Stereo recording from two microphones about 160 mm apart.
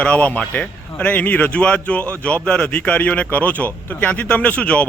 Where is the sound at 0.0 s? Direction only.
10° left (ahead or behind).